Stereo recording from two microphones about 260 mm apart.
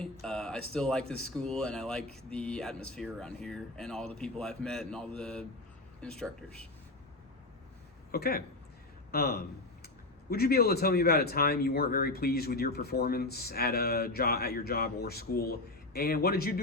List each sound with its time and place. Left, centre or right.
0.0 s speech: centre
8.1 s speech: left